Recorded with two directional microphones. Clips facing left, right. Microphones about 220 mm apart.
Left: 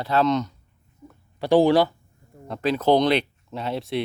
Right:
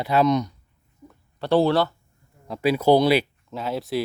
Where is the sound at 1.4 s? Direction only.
15° left (ahead or behind).